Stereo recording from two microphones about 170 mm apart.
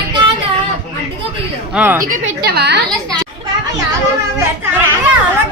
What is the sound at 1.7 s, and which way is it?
Speech, 10° right (ahead or behind).